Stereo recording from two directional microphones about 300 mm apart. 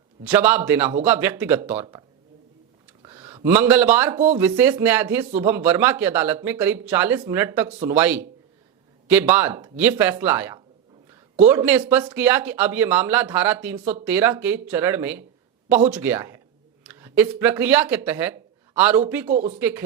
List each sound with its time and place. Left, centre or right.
0.3 s speech: centre
13.7 s speech: right
14.0 s speech: centre
19.3 s speech: right
19.5 s speech: centre